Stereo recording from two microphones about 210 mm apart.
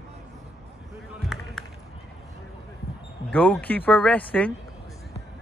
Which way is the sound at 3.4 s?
5° left (ahead or behind).